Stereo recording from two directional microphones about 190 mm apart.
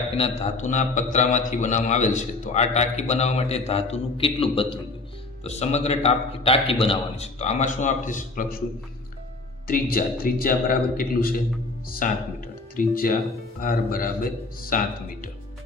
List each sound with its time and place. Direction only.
0.2 s a man's voice: 35° left (ahead or behind)
9.6 s a man's voice: 50° left (ahead or behind)